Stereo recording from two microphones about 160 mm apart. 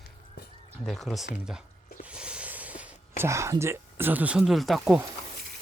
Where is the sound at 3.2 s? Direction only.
20° right (ahead or behind); by 5.0 s centre (ahead or behind).